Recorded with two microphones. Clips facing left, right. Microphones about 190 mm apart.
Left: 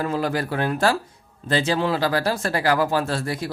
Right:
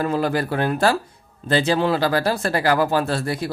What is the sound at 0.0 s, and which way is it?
Speech, 55° right (ahead or behind).